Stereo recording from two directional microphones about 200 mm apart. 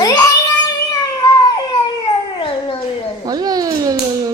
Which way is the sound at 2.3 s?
25° left (ahead or behind).